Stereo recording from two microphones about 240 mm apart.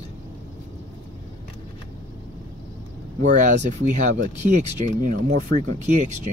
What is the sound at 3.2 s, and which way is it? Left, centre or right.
Speech, right.